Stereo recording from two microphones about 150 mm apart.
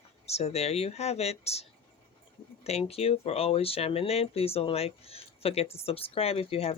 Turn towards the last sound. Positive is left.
turn(degrees=40)  # may be behind; listen again after turning